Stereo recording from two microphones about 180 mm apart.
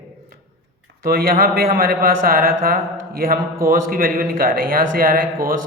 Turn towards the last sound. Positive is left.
turn(degrees=-55)  # may be behind; listen again after turning